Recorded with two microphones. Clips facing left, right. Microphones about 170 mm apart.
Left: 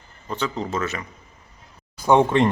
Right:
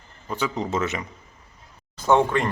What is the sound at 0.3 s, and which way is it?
Speech, 10° right (ahead or behind).